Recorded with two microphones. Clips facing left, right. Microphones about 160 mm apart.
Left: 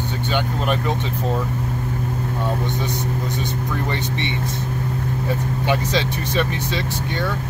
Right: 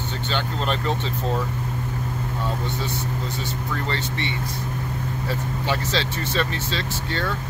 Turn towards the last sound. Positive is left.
turn(degrees=15)  # may be behind; listen again after turning